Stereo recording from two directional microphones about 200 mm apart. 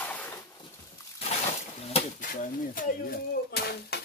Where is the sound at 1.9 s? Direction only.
40° left (ahead or behind).